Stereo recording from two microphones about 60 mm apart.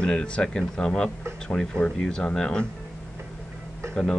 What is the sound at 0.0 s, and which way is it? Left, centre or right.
Speech, centre.